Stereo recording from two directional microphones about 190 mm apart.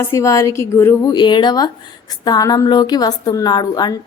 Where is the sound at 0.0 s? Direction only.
15° left (ahead or behind).